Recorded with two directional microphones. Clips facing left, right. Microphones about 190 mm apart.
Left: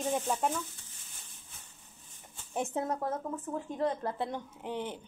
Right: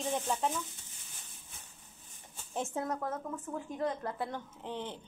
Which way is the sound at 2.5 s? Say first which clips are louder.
Left 3 dB; 15° left (ahead or behind).